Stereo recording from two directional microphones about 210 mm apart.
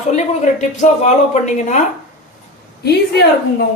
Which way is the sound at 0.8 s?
35° left (ahead or behind).